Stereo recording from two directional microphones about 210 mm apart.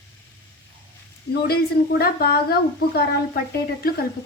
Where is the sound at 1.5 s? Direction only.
50° left (ahead or behind).